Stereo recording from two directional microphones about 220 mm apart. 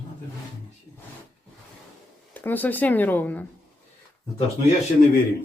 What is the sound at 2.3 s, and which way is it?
Speech, 10° left (ahead or behind).